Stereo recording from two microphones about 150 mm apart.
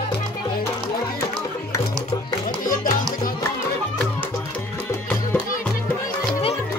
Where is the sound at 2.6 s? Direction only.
65° left (ahead or behind).